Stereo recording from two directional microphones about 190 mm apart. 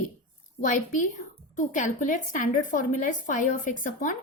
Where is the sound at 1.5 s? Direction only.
40° left (ahead or behind).